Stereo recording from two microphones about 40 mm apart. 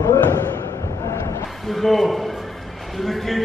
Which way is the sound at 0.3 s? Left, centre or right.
Left.